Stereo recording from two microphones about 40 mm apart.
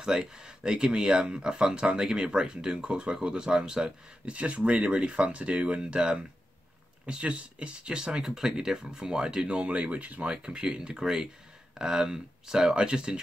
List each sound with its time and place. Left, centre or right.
0.0 s speech: centre
4.3 s speech: right
10.3 s speech: right